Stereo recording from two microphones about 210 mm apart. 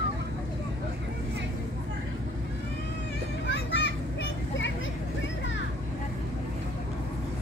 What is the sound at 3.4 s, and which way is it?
Children playing, 55° left (ahead or behind).